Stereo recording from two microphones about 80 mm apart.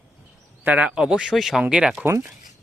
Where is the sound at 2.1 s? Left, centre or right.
Right.